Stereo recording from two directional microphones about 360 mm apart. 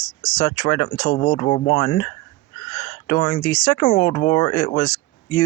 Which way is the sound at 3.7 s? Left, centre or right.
Left.